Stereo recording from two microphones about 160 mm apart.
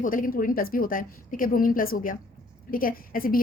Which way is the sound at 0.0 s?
60° left (ahead or behind).